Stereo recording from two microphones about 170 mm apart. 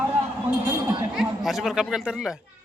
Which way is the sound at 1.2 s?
Centre (ahead or behind).